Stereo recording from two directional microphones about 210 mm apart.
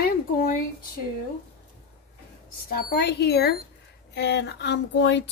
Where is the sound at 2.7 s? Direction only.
45° left (ahead or behind).